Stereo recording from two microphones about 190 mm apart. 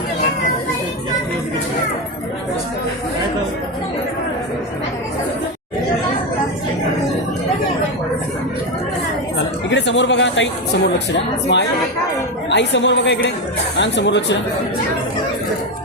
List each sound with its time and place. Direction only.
9.6 s speech: 70° left (ahead or behind)